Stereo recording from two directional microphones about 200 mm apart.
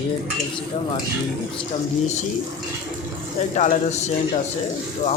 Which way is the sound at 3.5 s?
40° left (ahead or behind).